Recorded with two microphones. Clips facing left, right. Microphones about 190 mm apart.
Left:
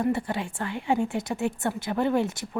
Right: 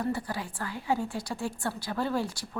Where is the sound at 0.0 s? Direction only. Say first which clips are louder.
Left 5 dB; 25° left (ahead or behind).